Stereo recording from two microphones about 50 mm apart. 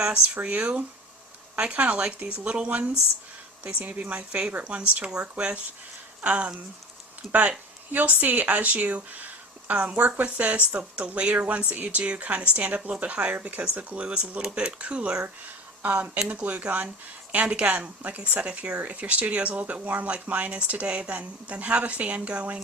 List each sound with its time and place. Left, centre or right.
0.4 s speech: right
15.8 s speech: right
16.0 s speech: centre
16.3 s speech: right